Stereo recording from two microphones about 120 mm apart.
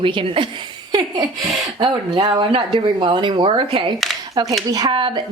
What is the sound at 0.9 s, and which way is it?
A woman's voice, 35° right (ahead or behind).